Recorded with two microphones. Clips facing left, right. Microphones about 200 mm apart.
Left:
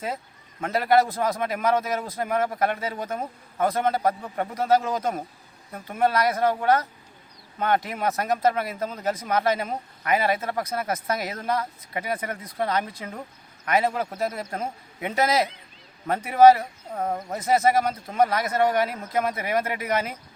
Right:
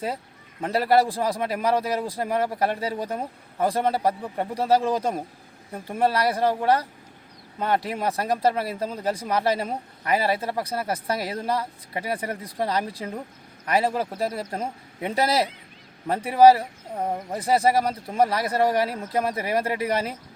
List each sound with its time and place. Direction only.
0.6 s speech: 35° right (ahead or behind)
16.9 s speech: 15° right (ahead or behind)
17.3 s speech: 35° right (ahead or behind)